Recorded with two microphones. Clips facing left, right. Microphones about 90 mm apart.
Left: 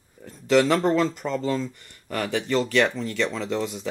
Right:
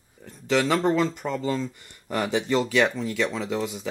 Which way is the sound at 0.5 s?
Centre (ahead or behind).